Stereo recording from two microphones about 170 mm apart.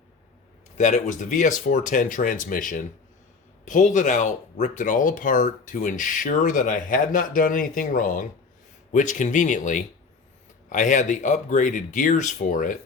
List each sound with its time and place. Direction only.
0.8 s speech: 45° left (ahead or behind)